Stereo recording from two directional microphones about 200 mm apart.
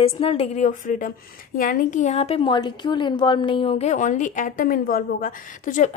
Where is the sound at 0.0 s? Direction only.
30° left (ahead or behind).